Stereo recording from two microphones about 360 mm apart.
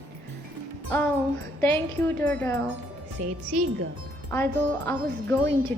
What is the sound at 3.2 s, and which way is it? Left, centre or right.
Speech, centre.